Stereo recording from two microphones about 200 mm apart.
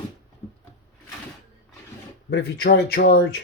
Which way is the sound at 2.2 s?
55° left (ahead or behind).